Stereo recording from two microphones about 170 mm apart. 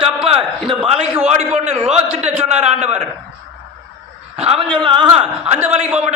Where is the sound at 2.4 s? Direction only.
40° right (ahead or behind).